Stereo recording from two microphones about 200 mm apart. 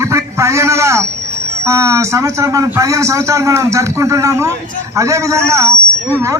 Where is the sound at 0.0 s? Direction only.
15° right (ahead or behind).